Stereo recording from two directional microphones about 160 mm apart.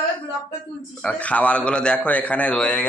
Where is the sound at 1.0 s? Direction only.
10° left (ahead or behind).